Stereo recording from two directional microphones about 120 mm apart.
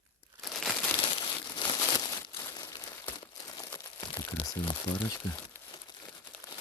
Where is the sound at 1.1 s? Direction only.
45° left (ahead or behind).